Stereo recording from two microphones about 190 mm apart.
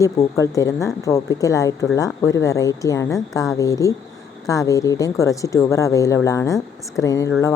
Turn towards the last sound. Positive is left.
turn(degrees=15)  # may be behind; listen again after turning